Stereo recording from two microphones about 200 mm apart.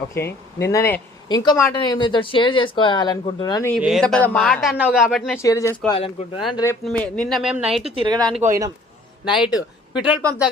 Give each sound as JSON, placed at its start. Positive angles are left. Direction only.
{"t": 0.1, "sound": "speech", "side_deg": 10}
{"t": 3.8, "sound": "a man's voice", "side_deg": 0}
{"t": 5.4, "sound": "speech", "side_deg": 15}
{"t": 6.5, "sound": "speech", "side_deg": 15}
{"t": 6.8, "sound": "a man's voice", "side_deg": 5}
{"t": 7.9, "sound": "speech", "side_deg": -20}
{"t": 9.2, "sound": "a man's voice", "side_deg": -5}
{"t": 9.5, "sound": "a man's voice", "side_deg": 20}